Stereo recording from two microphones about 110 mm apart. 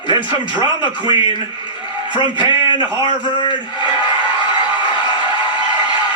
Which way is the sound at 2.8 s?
45° left (ahead or behind).